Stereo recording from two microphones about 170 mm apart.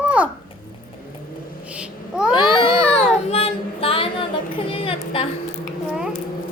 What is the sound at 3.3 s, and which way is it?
Female singing, 35° left (ahead or behind).